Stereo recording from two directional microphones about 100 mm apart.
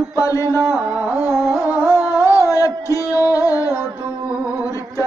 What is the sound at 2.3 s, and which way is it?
Music, 35° left (ahead or behind).